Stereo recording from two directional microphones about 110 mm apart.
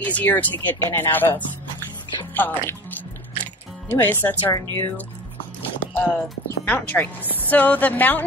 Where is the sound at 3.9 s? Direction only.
20° left (ahead or behind).